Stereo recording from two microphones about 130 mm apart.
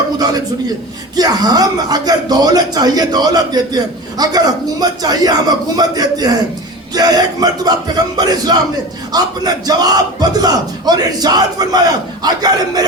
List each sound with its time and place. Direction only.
1.1 s speech: 30° right (ahead or behind)